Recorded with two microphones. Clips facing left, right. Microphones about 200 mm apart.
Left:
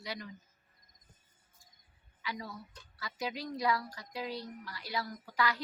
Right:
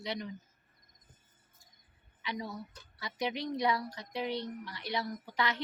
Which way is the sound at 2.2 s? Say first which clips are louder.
Right 3 dB; 20° right (ahead or behind).